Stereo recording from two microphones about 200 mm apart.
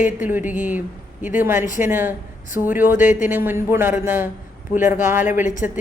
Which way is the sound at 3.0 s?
40° left (ahead or behind).